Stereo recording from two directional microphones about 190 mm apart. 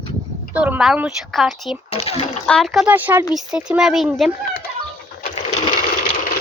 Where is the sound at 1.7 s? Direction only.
30° left (ahead or behind).